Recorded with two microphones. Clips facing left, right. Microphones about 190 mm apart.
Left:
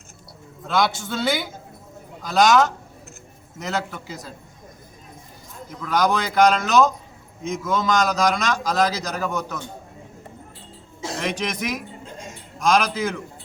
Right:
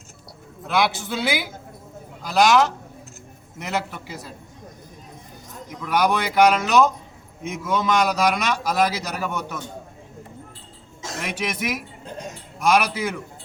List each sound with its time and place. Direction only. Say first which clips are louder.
0.7 s speech: even; 5° right (ahead or behind)
3.7 s a man's voice: even; 10° right (ahead or behind)
5.8 s a man's voice: even; 10° right (ahead or behind)
11.2 s a man's voice: left 1 dB; 10° right (ahead or behind)
12.0 s music: right 4 dB; 65° right (ahead or behind)
12.5 s a man's voice: even; 5° right (ahead or behind)